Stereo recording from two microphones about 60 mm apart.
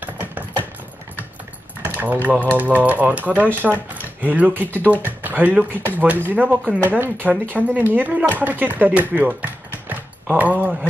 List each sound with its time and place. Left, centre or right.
0.0 s typing: right
1.8 s a sound: right
2.2 s speech: right
7.5 s speech: centre
7.9 s speech: right
9.8 s a sound: right